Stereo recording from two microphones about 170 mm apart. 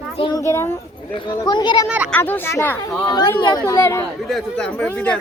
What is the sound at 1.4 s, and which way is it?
Speech, 25° left (ahead or behind).